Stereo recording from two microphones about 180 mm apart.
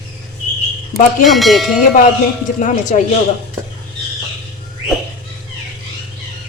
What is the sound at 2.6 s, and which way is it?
Speech, 45° left (ahead or behind).